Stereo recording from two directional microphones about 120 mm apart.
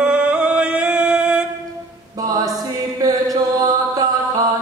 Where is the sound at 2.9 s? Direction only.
30° right (ahead or behind).